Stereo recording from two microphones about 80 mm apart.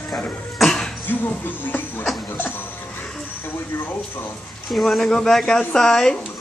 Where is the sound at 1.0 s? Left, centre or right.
Left.